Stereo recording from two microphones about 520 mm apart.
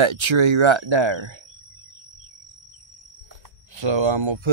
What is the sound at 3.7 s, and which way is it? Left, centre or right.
Speech, right.